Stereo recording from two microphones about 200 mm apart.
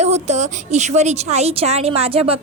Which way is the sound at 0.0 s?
35° right (ahead or behind).